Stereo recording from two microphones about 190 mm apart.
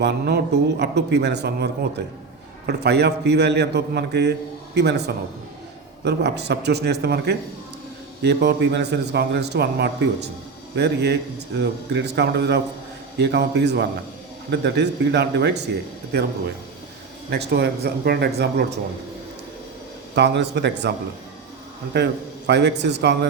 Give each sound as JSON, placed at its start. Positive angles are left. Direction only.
{"t": 0.0, "sound": "a man's voice", "side_deg": -55}
{"t": 20.1, "sound": "a man's voice", "side_deg": -65}
{"t": 21.9, "sound": "a man's voice", "side_deg": -60}